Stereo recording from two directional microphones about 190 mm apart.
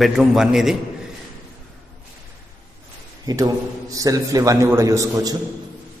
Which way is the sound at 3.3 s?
20° right (ahead or behind).